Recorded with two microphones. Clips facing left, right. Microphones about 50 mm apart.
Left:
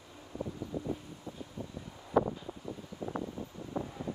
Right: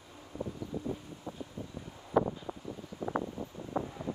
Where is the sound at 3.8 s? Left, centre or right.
Centre.